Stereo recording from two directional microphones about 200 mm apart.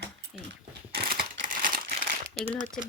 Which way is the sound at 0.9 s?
45° right (ahead or behind).